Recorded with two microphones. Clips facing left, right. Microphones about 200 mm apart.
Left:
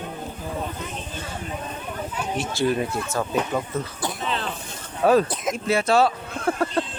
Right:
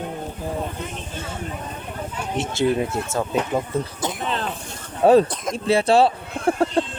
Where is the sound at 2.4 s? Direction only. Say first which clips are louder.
Right 3 dB; 25° right (ahead or behind).